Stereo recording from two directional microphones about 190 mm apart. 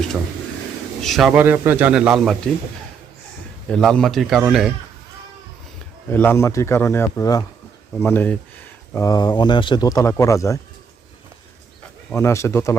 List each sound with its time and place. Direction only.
1.0 s speech: centre (ahead or behind)
3.7 s speech: 5° left (ahead or behind)
6.1 s speech: 10° left (ahead or behind)
12.1 s speech: 15° left (ahead or behind)